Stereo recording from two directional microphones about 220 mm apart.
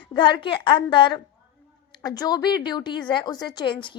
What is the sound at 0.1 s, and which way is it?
A woman's voice, 20° left (ahead or behind).